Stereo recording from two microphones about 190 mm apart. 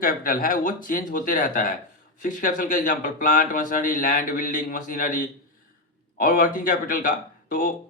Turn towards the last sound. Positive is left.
turn(degrees=45)  # may be behind; listen again after turning